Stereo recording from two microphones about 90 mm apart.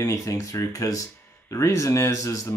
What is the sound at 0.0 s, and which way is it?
Speech, 35° left (ahead or behind).